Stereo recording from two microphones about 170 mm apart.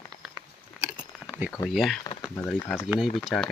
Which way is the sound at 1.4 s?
10° right (ahead or behind).